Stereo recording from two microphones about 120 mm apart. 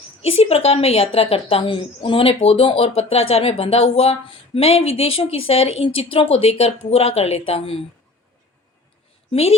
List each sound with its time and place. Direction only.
0.2 s a woman's voice: 55° left (ahead or behind)
9.3 s a woman's voice: 60° left (ahead or behind)